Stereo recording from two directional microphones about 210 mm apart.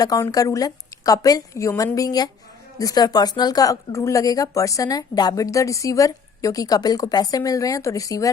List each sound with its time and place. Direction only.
0.0 s speech: 15° left (ahead or behind)